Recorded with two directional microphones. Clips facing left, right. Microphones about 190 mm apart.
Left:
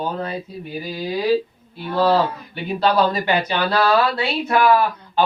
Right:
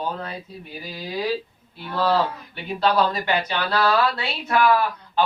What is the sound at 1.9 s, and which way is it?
Speech, 30° left (ahead or behind).